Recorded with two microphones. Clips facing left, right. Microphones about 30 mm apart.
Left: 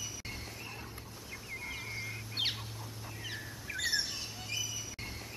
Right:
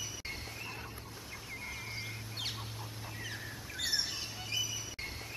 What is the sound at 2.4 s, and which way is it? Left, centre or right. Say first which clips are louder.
Duck: left 7 dB; left.